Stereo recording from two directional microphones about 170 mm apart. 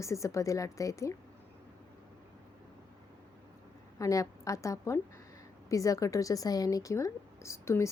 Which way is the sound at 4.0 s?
20° left (ahead or behind).